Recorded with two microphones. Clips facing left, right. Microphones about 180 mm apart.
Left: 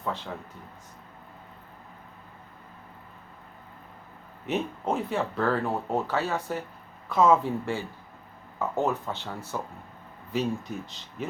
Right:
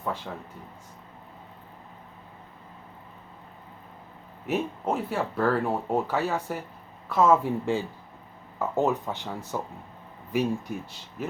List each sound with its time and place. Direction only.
4.4 s speech: 5° right (ahead or behind)
7.6 s speech: 15° right (ahead or behind)